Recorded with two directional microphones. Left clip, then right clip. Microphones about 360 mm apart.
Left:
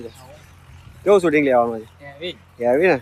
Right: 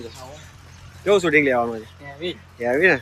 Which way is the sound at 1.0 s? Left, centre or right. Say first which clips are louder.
Left 2 dB; centre.